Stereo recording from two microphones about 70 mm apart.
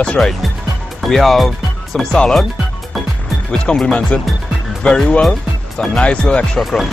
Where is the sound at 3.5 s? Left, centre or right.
Centre.